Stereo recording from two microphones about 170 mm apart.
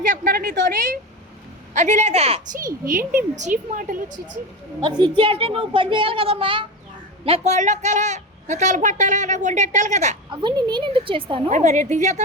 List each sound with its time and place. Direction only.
0.1 s a sound: 60° right (ahead or behind)
1.7 s speech: 45° right (ahead or behind)
2.8 s speech: 55° right (ahead or behind)
4.8 s a woman's voice: 30° right (ahead or behind); by 10.2 s 45° right (ahead or behind)
10.4 s a woman's voice: 25° right (ahead or behind)
11.5 s speech: 45° right (ahead or behind)